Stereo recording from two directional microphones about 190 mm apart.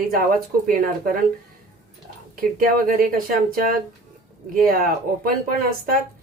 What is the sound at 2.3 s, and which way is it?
Speech, 50° right (ahead or behind).